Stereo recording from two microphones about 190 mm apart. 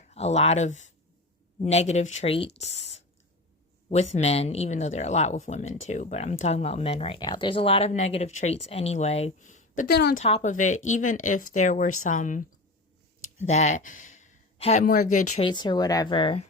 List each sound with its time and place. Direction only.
0.1 s speech: 35° left (ahead or behind); by 10.2 s 55° left (ahead or behind)
10.2 s speech: 35° left (ahead or behind)
15.4 s speech: 25° left (ahead or behind)